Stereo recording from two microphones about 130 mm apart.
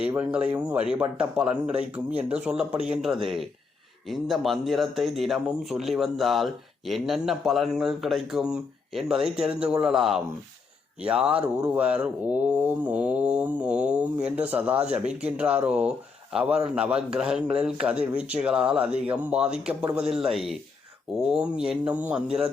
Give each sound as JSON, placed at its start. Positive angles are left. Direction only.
{"t": 0.1, "sound": "speech", "side_deg": -10}